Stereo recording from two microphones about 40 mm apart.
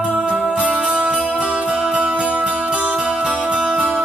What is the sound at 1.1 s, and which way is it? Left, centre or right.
Music, centre.